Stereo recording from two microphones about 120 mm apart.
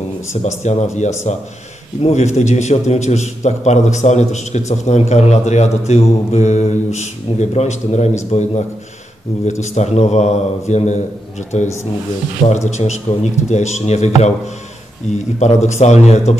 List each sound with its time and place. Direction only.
0.4 s a man's voice: 65° left (ahead or behind)
15.3 s a man's voice: 75° left (ahead or behind)